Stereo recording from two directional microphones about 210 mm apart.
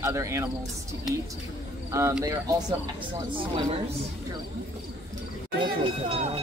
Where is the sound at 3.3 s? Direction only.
25° right (ahead or behind).